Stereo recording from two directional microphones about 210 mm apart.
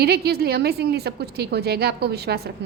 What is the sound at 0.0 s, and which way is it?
A woman's voice, 50° right (ahead or behind).